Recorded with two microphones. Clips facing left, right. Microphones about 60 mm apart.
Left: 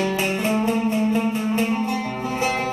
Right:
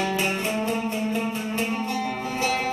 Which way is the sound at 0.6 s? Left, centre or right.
Left.